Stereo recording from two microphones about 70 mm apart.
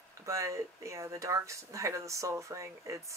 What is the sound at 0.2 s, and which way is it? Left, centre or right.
Speech, right.